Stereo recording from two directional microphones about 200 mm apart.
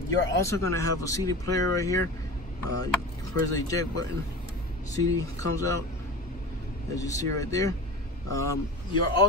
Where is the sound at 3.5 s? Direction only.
15° left (ahead or behind).